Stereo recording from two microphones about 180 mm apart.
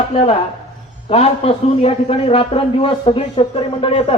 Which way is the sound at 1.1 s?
35° left (ahead or behind).